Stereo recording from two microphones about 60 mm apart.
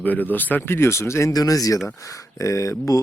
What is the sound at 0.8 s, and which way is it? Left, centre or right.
Speech, left.